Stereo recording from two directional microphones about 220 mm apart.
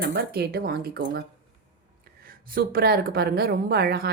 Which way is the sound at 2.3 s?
40° right (ahead or behind).